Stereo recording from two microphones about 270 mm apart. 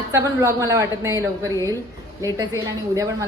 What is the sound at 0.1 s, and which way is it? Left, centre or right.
A woman's voice, centre.